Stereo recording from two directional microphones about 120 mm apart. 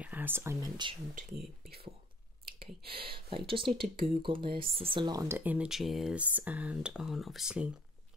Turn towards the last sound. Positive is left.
turn(degrees=-5)  # may be behind; listen again after turning